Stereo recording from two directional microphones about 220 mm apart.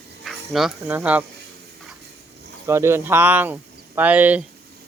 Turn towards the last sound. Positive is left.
turn(degrees=-5)  # may be behind; listen again after turning